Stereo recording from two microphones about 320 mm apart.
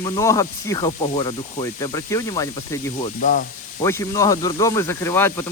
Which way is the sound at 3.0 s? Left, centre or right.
Left.